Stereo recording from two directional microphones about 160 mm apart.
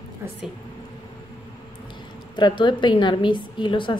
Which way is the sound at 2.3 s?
30° left (ahead or behind).